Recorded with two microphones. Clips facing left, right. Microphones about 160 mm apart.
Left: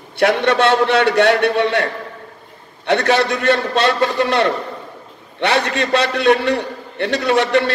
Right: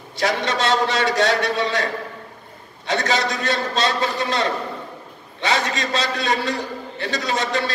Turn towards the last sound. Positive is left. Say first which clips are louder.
# left 8 dB
turn(degrees=65)  # may be behind; listen again after turning